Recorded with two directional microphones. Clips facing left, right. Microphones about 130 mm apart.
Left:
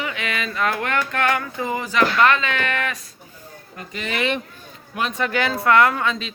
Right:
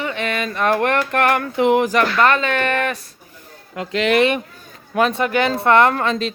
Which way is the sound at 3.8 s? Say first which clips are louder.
Right 12 dB; 90° right.